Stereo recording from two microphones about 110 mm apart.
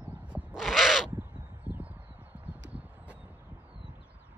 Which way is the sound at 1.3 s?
25° right (ahead or behind).